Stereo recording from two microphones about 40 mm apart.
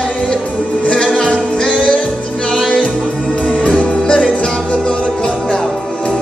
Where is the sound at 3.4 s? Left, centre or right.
Left.